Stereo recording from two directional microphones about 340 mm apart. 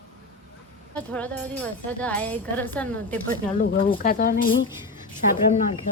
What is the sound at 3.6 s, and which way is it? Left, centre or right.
Speech, left.